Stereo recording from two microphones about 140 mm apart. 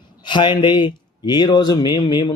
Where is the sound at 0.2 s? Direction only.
35° left (ahead or behind).